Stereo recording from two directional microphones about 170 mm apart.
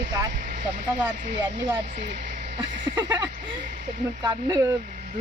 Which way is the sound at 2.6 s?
25° right (ahead or behind).